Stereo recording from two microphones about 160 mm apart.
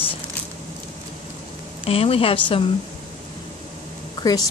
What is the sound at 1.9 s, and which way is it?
Speech, 35° left (ahead or behind).